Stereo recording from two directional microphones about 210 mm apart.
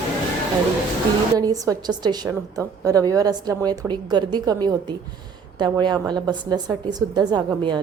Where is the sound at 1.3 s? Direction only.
15° right (ahead or behind).